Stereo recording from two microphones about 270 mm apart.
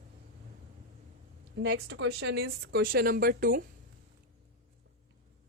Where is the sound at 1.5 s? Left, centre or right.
Right.